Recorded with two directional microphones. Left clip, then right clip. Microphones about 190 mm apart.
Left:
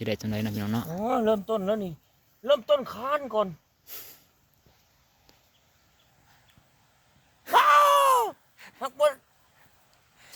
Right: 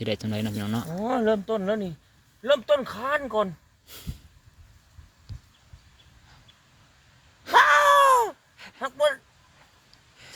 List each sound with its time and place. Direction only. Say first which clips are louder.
0.0 s speech: right 2 dB; 5° left (ahead or behind)
7.4 s groan: right 1 dB; 20° left (ahead or behind)